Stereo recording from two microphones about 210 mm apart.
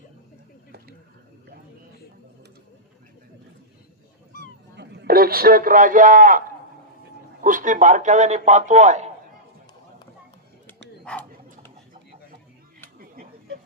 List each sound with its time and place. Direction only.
4.4 s cat: 50° right (ahead or behind)
7.4 s a man's voice: 40° right (ahead or behind)
11.0 s a sound: 5° left (ahead or behind)